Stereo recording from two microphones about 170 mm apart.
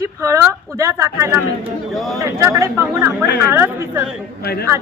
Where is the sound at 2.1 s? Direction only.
20° right (ahead or behind).